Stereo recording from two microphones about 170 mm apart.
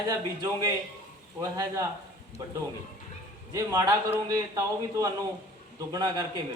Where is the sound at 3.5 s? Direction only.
20° right (ahead or behind).